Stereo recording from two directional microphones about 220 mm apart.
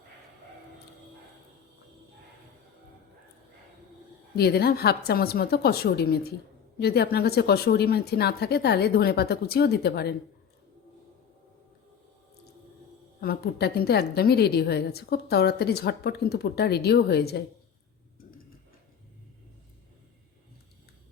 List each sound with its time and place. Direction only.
4.4 s a woman's voice: 45° left (ahead or behind)
13.2 s a woman's voice: 45° left (ahead or behind)